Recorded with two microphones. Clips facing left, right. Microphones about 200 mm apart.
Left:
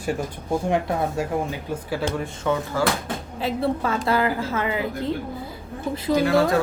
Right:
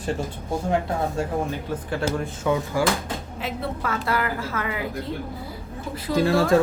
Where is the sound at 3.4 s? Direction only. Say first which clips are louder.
Left 7 dB; 30° left (ahead or behind).